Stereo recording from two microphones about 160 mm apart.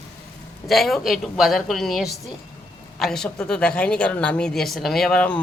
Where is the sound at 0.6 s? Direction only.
Centre (ahead or behind).